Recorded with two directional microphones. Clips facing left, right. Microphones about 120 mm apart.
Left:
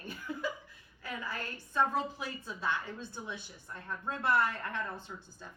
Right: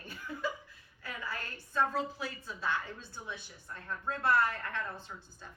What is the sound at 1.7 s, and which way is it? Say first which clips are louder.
Speech: left 1 dB; 20° left (ahead or behind).